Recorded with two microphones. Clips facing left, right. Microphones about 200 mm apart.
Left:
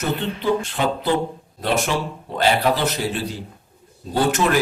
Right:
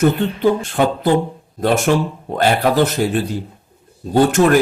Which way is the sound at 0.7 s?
50° right (ahead or behind).